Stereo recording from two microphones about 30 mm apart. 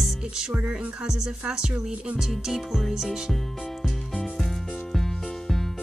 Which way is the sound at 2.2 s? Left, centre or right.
Centre.